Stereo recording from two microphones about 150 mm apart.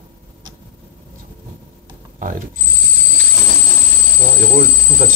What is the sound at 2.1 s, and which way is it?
Mechanisms, 60° right (ahead or behind).